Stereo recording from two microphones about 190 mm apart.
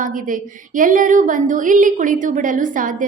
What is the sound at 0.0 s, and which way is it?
A woman's voice, 45° right (ahead or behind).